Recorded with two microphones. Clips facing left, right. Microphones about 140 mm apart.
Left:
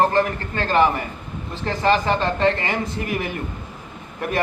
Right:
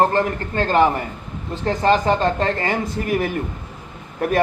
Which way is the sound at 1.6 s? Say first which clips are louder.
Right 2 dB; 45° right (ahead or behind).